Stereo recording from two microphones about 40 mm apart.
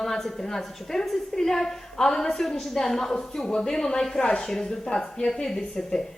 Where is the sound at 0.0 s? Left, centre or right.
Centre.